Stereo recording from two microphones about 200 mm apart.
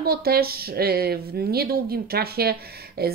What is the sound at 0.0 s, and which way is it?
Speech, 50° right (ahead or behind).